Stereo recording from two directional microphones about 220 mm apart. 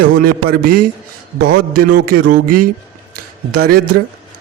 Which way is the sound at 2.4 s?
90° right.